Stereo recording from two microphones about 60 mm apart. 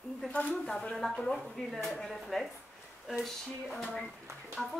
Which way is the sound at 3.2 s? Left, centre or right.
Centre.